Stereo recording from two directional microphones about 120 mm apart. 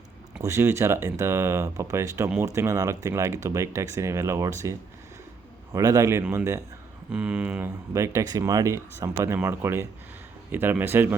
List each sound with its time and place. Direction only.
0.3 s speech: 20° right (ahead or behind)
7.1 s speech: 10° right (ahead or behind)
7.9 s speech: 25° right (ahead or behind)